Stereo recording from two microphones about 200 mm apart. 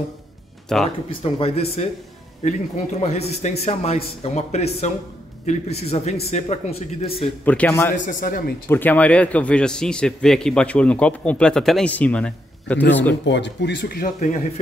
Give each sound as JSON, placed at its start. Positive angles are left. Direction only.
{"t": 0.7, "sound": "a man's voice", "side_deg": 0}
{"t": 1.2, "sound": "a man's voice", "side_deg": 30}
{"t": 7.4, "sound": "a man's voice", "side_deg": 10}
{"t": 8.1, "sound": "a man's voice", "side_deg": 40}
{"t": 8.6, "sound": "a man's voice", "side_deg": 10}
{"t": 13.2, "sound": "speech", "side_deg": 60}